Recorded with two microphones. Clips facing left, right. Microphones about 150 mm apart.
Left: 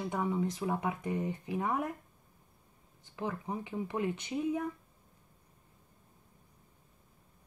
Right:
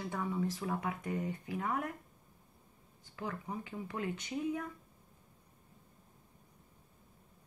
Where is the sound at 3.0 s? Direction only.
25° left (ahead or behind).